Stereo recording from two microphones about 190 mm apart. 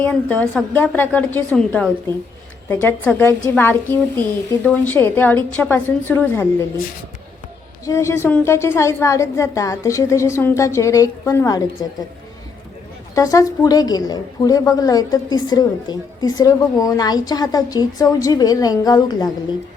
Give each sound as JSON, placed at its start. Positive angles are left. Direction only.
{"t": 0.0, "sound": "a woman's voice", "side_deg": 10}
{"t": 7.9, "sound": "a woman's voice", "side_deg": 15}
{"t": 13.1, "sound": "a woman's voice", "side_deg": 15}